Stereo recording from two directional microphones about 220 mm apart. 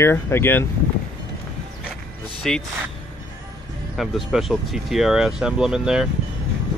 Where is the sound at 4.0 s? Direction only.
Centre (ahead or behind).